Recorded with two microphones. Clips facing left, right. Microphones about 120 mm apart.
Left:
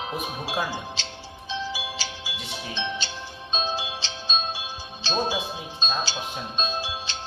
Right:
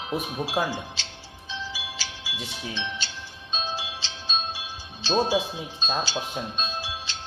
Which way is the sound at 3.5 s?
20° left (ahead or behind).